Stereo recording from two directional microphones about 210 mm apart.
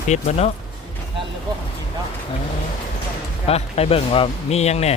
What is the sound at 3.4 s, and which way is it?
Speech, 30° left (ahead or behind).